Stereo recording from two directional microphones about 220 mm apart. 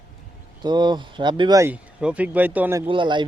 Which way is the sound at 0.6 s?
20° right (ahead or behind).